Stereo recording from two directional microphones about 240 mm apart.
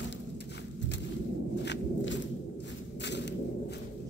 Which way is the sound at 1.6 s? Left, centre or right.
Left.